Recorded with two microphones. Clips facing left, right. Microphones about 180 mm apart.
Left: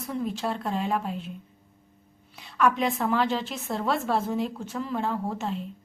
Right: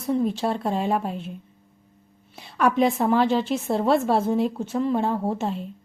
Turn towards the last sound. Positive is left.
turn(degrees=-30)  # may be behind; listen again after turning